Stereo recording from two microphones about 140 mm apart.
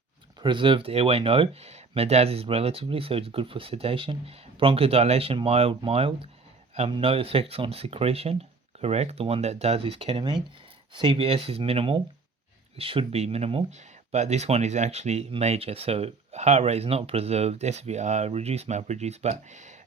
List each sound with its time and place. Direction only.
0.4 s speech: 35° right (ahead or behind)
13.7 s speech: 55° right (ahead or behind)